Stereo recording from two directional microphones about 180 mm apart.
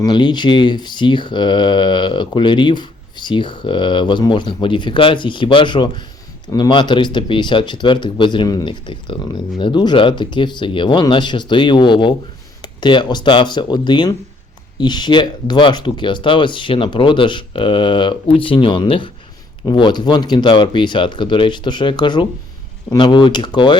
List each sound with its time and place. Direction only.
0.0 s speech: 25° left (ahead or behind)